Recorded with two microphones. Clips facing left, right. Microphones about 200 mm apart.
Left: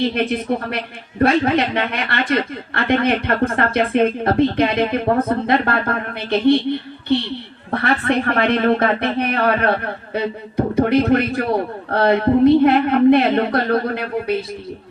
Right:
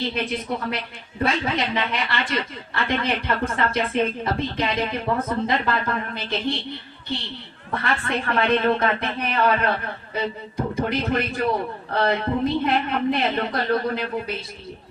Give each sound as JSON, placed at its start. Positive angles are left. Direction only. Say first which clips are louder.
{"t": 0.1, "sound": "speech", "louder": "left 7 dB", "side_deg": 55}
{"t": 7.7, "sound": "speech", "louder": "left 7 dB", "side_deg": 65}